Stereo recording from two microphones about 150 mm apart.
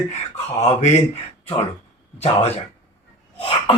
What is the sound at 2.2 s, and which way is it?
Speech, 45° left (ahead or behind).